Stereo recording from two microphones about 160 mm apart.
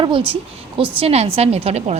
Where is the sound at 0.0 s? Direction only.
30° right (ahead or behind).